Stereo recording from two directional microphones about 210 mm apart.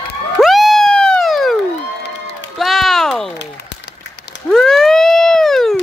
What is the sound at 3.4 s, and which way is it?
Applause, 55° left (ahead or behind).